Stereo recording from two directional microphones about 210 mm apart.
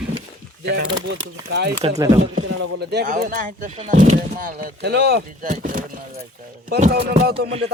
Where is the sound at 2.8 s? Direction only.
50° right (ahead or behind).